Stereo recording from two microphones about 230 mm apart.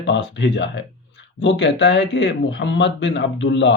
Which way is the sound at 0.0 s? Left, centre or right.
Left.